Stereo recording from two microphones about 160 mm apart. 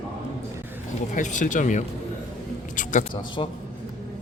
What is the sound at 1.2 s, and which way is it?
Speech, 50° left (ahead or behind).